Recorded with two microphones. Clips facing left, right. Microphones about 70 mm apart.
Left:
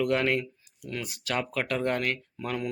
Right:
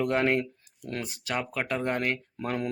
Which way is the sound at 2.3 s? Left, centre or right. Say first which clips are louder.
Right 1 dB; right.